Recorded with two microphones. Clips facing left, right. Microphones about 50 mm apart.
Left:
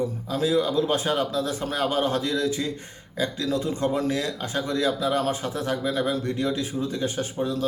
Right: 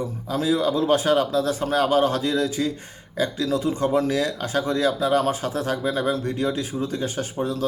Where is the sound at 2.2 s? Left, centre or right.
Right.